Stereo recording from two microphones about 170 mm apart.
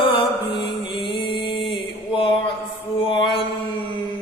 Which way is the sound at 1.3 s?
30° left (ahead or behind).